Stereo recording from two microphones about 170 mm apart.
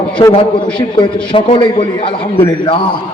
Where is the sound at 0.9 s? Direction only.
30° left (ahead or behind).